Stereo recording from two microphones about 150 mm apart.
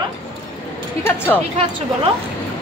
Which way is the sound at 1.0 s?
15° left (ahead or behind).